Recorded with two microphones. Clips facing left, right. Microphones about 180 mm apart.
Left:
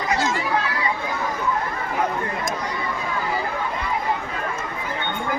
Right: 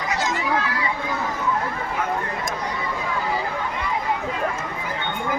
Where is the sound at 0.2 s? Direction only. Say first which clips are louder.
Left 2 dB; 20° right (ahead or behind).